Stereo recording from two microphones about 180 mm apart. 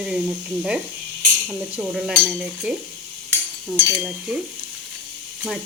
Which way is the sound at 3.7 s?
15° right (ahead or behind).